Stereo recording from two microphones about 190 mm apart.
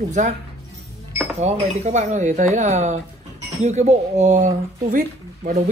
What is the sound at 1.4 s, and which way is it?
A woman's voice, 35° right (ahead or behind).